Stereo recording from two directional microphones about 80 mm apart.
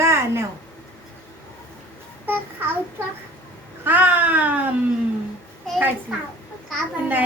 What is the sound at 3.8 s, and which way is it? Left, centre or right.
Speech, right.